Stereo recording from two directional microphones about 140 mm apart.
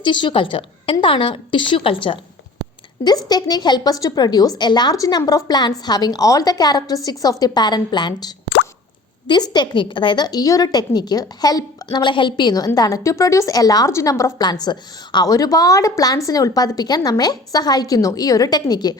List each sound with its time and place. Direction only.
0.0 s a woman's voice: 35° left (ahead or behind)